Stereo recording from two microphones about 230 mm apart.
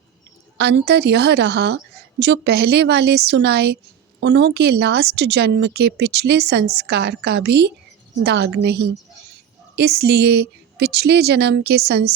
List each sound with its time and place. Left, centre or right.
0.5 s speech: right